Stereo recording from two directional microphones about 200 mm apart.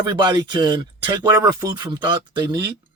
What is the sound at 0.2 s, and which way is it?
A man's voice, 20° right (ahead or behind).